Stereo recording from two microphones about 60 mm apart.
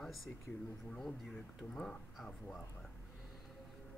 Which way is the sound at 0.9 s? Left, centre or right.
Centre.